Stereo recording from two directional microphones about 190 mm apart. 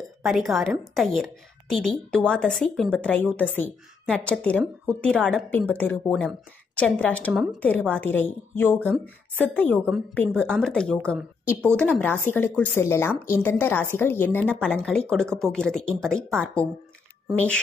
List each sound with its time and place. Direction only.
0.2 s a woman's voice: centre (ahead or behind)